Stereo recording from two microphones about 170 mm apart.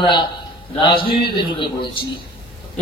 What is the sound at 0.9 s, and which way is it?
Speech, 60° left (ahead or behind).